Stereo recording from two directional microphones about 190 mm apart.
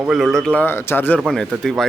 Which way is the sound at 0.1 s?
Centre (ahead or behind).